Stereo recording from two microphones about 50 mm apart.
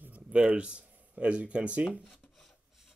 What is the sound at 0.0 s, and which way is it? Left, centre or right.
Speech, right.